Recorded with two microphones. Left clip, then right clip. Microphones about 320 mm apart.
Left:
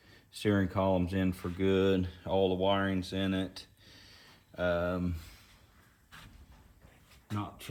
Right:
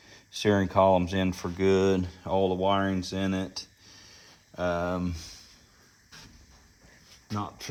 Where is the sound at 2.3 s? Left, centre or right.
Right.